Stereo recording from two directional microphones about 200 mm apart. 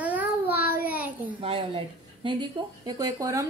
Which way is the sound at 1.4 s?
30° right (ahead or behind).